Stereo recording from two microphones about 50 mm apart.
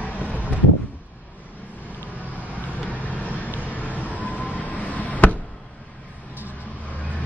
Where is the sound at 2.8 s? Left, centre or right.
Left.